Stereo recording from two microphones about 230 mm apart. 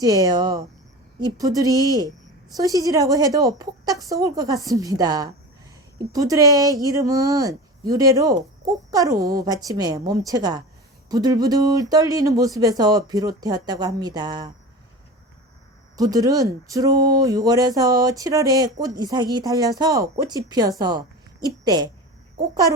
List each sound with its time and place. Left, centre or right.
0.0 s speech: centre
16.0 s a woman's voice: centre